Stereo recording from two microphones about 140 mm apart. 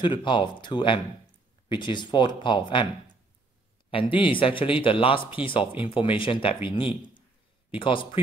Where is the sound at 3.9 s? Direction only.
40° left (ahead or behind).